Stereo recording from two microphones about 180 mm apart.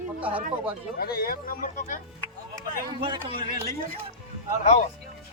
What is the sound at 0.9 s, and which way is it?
Speech, 60° left (ahead or behind).